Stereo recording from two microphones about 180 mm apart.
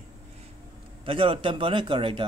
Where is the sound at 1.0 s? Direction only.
30° right (ahead or behind).